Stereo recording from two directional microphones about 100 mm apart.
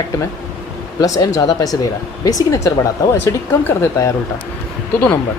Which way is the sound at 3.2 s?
20° left (ahead or behind).